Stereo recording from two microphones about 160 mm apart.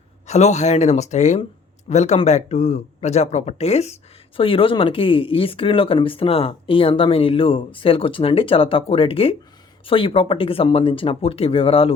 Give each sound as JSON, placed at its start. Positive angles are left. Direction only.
{"t": 0.3, "sound": "speech", "side_deg": 45}